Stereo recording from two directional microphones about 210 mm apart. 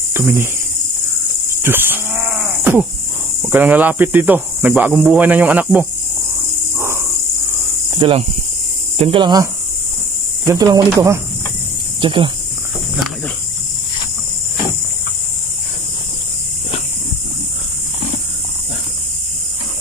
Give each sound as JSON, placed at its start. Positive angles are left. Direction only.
{"t": 0.1, "sound": "speech", "side_deg": -10}
{"t": 1.5, "sound": "livestock", "side_deg": -10}
{"t": 2.6, "sound": "a sound", "side_deg": -10}
{"t": 3.4, "sound": "speech", "side_deg": -10}
{"t": 6.8, "sound": "cricket", "side_deg": -10}
{"t": 8.0, "sound": "speech", "side_deg": -25}